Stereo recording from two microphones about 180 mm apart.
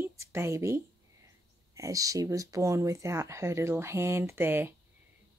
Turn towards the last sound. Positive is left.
turn(degrees=-10)  # may be behind; listen again after turning